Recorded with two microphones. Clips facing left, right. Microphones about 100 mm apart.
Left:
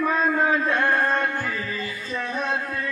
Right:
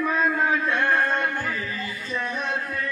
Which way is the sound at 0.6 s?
35° left (ahead or behind).